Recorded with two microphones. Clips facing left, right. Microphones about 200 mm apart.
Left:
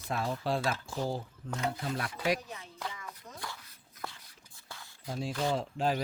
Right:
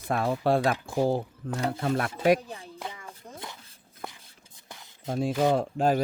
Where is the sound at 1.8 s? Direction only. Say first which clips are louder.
Right 8 dB; 55° right (ahead or behind).